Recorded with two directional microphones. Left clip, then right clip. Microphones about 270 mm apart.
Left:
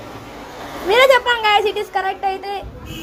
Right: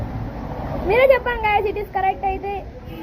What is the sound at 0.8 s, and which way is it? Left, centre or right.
Speech, left.